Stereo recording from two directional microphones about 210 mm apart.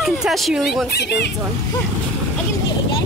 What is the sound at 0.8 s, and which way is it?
Speech, 50° left (ahead or behind).